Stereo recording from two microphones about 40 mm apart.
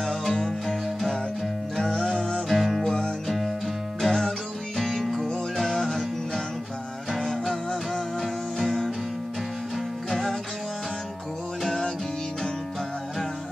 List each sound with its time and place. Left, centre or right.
0.0 s music: centre
1.9 s music: centre
2.4 s music: centre
10.0 s music: centre